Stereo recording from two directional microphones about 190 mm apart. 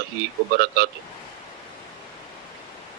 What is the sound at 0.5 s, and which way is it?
Speech, 60° right (ahead or behind).